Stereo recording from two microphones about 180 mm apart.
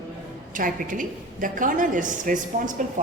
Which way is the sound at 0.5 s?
45° right (ahead or behind).